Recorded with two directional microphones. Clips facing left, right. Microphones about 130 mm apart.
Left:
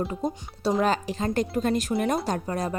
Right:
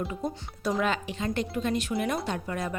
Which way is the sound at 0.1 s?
35° left (ahead or behind).